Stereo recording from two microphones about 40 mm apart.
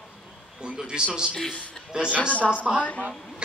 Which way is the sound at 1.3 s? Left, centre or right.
Centre.